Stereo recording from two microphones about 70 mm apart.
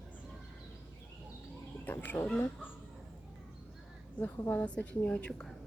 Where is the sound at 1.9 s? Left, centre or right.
Left.